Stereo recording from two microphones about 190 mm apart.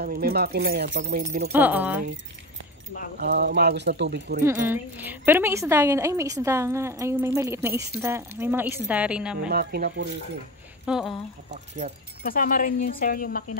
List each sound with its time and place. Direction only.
0.0 s speech: 50° right (ahead or behind); by 1.2 s 70° right (ahead or behind)
1.2 s speech: 50° right (ahead or behind)
1.5 s speech: 10° right (ahead or behind)
3.2 s speech: 55° right (ahead or behind)
4.4 s speech: 15° right (ahead or behind)
9.5 s speech: 55° right (ahead or behind)
10.9 s speech: centre (ahead or behind)
11.5 s speech: 35° right (ahead or behind)
12.2 s speech: 50° left (ahead or behind)